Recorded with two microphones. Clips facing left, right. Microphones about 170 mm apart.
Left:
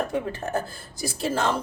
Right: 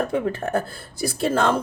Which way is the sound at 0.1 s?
60° right (ahead or behind).